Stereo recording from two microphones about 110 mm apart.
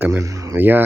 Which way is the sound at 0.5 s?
20° right (ahead or behind).